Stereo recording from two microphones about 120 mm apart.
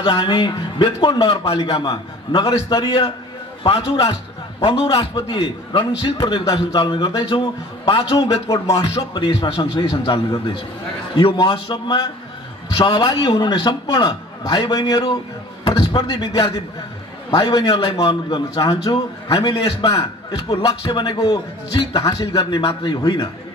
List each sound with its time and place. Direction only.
0.0 s a man's voice: 40° left (ahead or behind)
3.6 s a man's voice: 50° left (ahead or behind)
5.1 s a man's voice: 40° left (ahead or behind)
8.2 s speech: 30° left (ahead or behind)
8.8 s a man's voice: 50° left (ahead or behind); by 22.4 s 30° left (ahead or behind)
22.5 s a man's voice: 45° left (ahead or behind)